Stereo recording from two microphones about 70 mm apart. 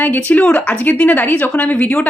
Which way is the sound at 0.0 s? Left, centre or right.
Left.